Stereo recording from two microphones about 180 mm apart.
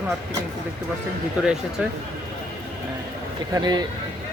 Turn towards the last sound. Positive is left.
turn(degrees=-25)  # may be behind; listen again after turning